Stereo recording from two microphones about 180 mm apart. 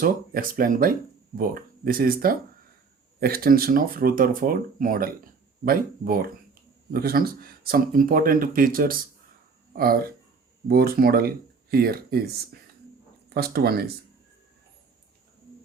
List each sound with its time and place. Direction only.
0.0 s speech: 50° right (ahead or behind)